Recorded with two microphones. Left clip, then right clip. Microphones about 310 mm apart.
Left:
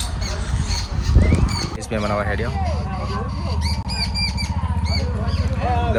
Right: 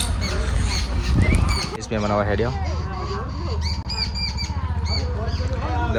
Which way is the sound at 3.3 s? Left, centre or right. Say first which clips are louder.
Left 1 dB; centre.